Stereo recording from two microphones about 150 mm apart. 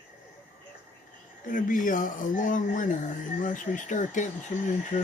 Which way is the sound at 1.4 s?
60° left (ahead or behind).